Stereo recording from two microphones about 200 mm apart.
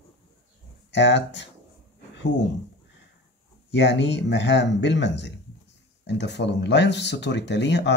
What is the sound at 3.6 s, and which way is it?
Speech, 60° left (ahead or behind).